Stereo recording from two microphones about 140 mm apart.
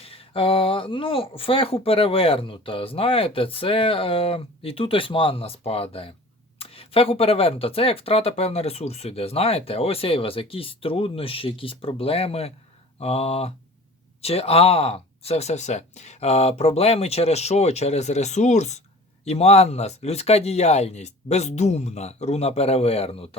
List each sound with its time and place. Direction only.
0.0 s speech: 45° left (ahead or behind)